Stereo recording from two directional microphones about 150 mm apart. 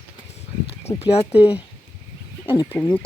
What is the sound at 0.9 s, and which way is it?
Speech, 45° left (ahead or behind).